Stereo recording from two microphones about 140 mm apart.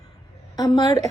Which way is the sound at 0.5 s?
25° left (ahead or behind).